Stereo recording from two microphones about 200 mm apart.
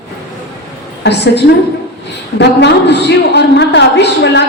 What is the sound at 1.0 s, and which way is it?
A woman's voice, 55° left (ahead or behind).